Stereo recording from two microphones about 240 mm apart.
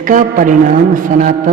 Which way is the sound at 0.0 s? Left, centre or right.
Right.